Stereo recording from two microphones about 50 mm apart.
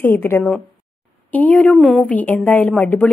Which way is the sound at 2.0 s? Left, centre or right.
Left.